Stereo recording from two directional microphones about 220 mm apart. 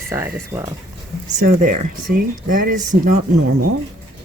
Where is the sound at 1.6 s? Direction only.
40° right (ahead or behind).